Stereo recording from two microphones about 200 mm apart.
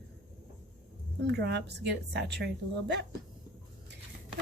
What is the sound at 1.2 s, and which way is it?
Speech, 60° right (ahead or behind).